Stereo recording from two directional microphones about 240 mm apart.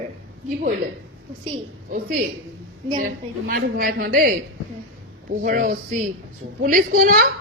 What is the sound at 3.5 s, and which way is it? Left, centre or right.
A woman's voice, right.